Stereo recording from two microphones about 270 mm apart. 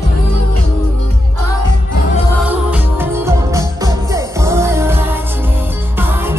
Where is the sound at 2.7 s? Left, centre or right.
Centre.